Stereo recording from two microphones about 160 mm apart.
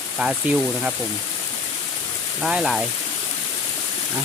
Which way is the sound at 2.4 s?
Centre (ahead or behind).